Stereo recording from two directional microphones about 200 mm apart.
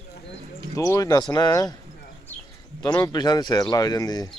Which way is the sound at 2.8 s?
20° left (ahead or behind).